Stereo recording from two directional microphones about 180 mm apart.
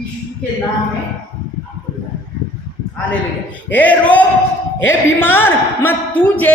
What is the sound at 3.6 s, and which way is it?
Speech, 10° left (ahead or behind).